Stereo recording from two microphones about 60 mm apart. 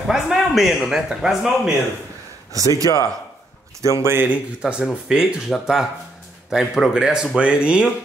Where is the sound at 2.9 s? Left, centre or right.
Left.